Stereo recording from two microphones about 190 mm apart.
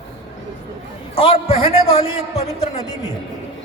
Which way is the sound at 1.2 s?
30° left (ahead or behind).